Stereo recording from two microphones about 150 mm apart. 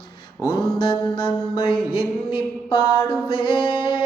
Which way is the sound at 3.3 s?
35° left (ahead or behind).